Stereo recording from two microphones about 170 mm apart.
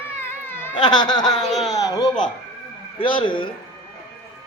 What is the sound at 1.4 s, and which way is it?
Speech, centre (ahead or behind).